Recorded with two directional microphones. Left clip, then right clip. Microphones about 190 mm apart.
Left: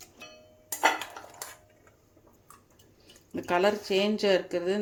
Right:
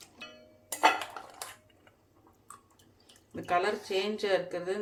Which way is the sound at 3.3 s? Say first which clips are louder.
Left 4 dB; 45° left (ahead or behind).